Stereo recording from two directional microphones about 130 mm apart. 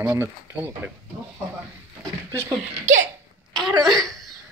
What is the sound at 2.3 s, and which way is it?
Speech, 20° right (ahead or behind).